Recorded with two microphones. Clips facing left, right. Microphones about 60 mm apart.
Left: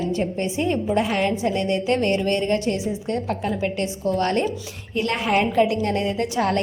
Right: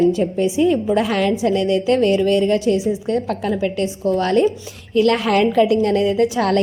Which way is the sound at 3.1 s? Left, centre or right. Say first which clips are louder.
Right 2 dB; right.